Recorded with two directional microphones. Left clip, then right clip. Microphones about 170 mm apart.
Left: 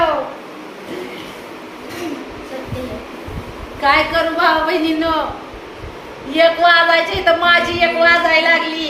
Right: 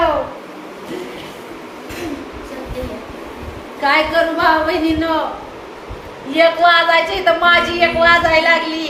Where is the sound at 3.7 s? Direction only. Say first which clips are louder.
Even; 5° left (ahead or behind).